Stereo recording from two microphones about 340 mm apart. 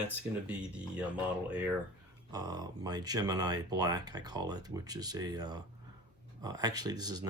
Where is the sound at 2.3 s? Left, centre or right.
Centre.